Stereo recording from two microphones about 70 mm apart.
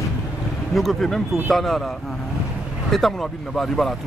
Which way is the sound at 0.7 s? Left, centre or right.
Centre.